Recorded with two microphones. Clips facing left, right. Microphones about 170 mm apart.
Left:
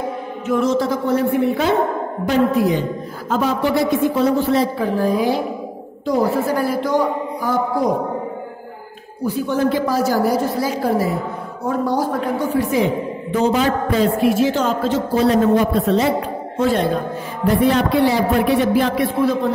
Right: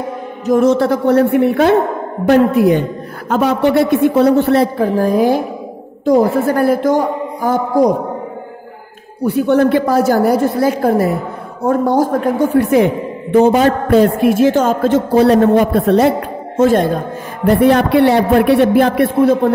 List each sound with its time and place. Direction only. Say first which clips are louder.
0.7 s a man's voice: right 5 dB; 65° right (ahead or behind)
4.8 s a woman's voice: right 5 dB; 45° right (ahead or behind)
9.2 s a man's voice: right 7 dB; 65° right (ahead or behind); by 17.0 s 45° right (ahead or behind)
17.5 s a man's voice: right 5 dB; 60° right (ahead or behind)